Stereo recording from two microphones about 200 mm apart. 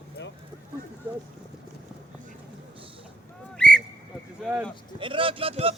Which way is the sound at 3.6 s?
5° left (ahead or behind).